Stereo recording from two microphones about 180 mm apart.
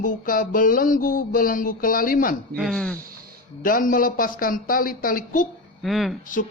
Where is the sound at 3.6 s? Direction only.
50° left (ahead or behind).